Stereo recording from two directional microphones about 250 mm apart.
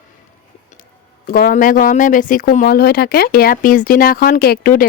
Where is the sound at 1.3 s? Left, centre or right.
Left.